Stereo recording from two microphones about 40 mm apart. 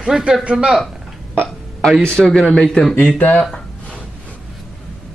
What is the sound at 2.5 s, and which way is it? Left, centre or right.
Speech, centre.